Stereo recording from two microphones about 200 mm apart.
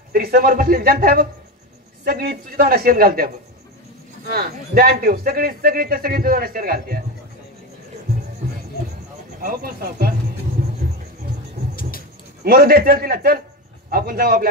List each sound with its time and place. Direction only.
0.1 s speech: 50° right (ahead or behind)
4.3 s speech: 50° right (ahead or behind)
9.4 s speech: 45° right (ahead or behind)
12.4 s speech: 50° right (ahead or behind)